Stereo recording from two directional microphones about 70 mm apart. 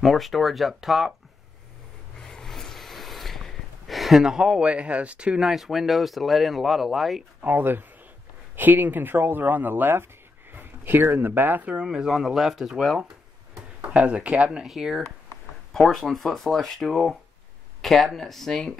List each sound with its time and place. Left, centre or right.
0.0 s speech: centre
2.2 s gasp: centre
5.5 s speech: centre
7.4 s speech: right; by 13.0 s centre
13.6 s speech: centre